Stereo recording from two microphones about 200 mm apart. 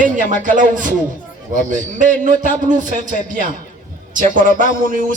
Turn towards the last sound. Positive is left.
turn(degrees=-40)  # may be behind; listen again after turning